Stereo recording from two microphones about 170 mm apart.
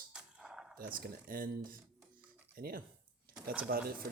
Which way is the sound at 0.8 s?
55° right (ahead or behind).